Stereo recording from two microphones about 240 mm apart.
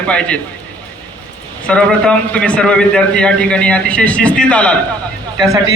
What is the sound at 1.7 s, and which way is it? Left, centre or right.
A man's voice, centre.